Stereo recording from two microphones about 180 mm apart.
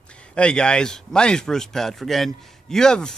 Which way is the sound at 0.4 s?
5° left (ahead or behind).